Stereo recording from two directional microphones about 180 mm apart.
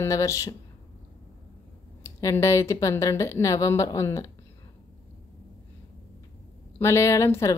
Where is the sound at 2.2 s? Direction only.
15° left (ahead or behind).